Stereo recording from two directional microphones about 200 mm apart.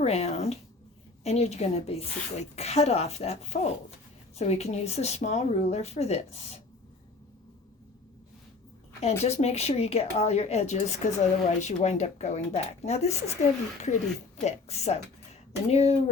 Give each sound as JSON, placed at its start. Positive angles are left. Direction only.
{"t": 0.0, "sound": "a woman's voice", "side_deg": 30}
{"t": 9.2, "sound": "a woman's voice", "side_deg": 30}